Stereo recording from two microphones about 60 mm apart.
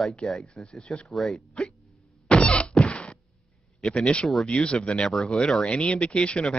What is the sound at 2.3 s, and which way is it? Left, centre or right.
Whack, centre.